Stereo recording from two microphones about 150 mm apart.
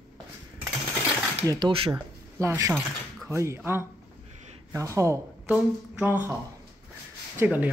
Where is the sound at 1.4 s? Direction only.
30° right (ahead or behind).